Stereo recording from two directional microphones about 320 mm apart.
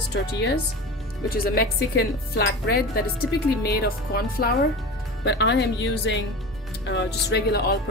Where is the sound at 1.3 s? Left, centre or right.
Left.